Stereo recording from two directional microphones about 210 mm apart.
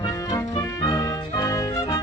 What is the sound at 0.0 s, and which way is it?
Music, 15° left (ahead or behind).